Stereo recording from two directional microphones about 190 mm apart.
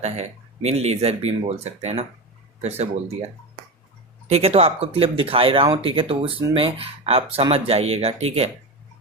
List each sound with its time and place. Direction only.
0.0 s speech: 35° right (ahead or behind)
4.3 s speech: 30° right (ahead or behind)